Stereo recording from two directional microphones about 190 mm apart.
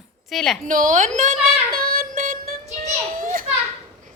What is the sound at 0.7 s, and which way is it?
Music, 45° right (ahead or behind).